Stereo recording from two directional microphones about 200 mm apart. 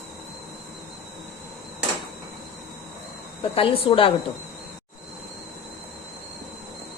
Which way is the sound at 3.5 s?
25° left (ahead or behind).